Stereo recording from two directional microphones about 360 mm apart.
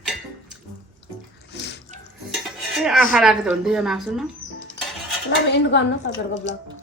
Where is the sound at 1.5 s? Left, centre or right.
Left.